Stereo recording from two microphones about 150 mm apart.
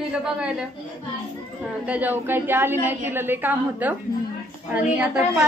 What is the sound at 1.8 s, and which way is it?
A woman's voice, 10° right (ahead or behind).